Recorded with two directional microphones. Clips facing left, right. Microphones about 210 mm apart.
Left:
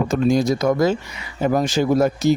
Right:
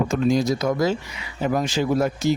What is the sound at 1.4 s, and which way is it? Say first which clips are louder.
Speech: left 4 dB; 45° left (ahead or behind).